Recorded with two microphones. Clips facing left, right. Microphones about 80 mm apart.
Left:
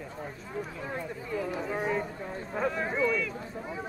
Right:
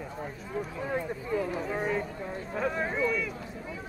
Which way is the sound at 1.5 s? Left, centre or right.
Centre.